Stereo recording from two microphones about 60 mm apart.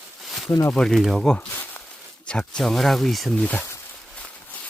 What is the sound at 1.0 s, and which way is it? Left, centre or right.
Speech, centre.